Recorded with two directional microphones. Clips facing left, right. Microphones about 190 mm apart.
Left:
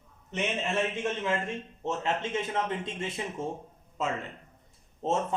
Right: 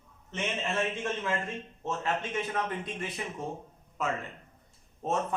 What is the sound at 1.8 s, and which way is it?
A man's voice, 20° left (ahead or behind).